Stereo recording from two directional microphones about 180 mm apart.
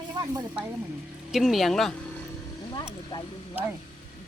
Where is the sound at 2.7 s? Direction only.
25° left (ahead or behind).